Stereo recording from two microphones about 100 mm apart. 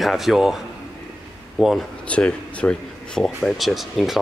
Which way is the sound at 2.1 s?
10° left (ahead or behind).